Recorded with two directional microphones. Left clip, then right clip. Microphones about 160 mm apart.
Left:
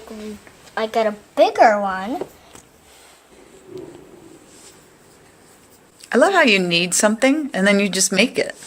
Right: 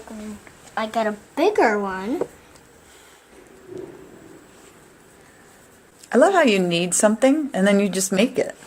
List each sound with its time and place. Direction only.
0.7 s speech: 35° left (ahead or behind)
6.1 s a woman's voice: 5° right (ahead or behind)